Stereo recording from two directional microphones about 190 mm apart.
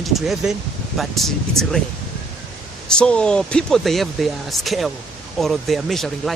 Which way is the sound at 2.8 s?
5° left (ahead or behind).